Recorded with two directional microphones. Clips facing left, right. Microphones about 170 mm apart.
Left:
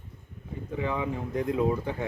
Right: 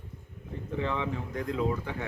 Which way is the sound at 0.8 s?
15° left (ahead or behind).